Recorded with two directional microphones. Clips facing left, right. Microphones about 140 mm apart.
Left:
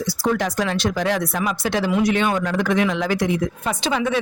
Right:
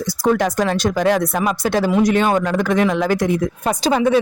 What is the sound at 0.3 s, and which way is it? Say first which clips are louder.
Speech: right 5 dB; 45° right (ahead or behind).